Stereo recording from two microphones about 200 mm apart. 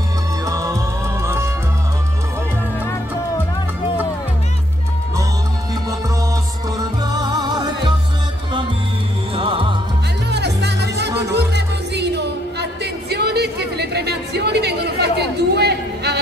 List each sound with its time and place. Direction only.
0.5 s music: 15° right (ahead or behind)
6.8 s music: 20° right (ahead or behind)
9.3 s music: 25° right (ahead or behind)
10.3 s music: 55° right (ahead or behind)